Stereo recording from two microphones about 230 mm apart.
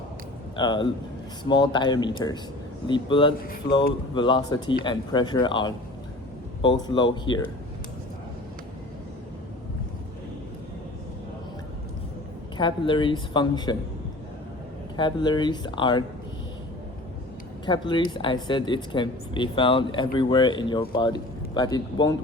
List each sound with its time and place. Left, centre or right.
0.5 s speech: centre
12.5 s speech: left
14.9 s speech: centre
17.7 s a man's voice: centre